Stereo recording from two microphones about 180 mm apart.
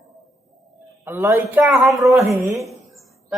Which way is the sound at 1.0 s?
10° right (ahead or behind).